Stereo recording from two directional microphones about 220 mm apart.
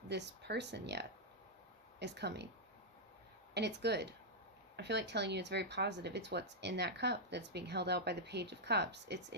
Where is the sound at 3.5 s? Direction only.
50° right (ahead or behind).